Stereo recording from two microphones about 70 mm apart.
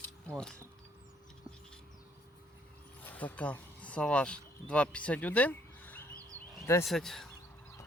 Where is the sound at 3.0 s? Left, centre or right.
Left.